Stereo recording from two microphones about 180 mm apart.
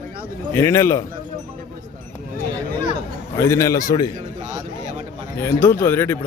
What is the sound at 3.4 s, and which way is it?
Speech, 15° left (ahead or behind).